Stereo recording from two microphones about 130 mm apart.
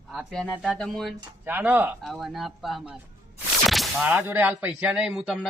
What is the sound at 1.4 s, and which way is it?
Speech, 15° right (ahead or behind).